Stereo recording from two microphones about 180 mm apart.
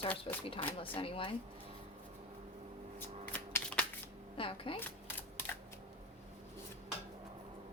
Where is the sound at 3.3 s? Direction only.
10° left (ahead or behind).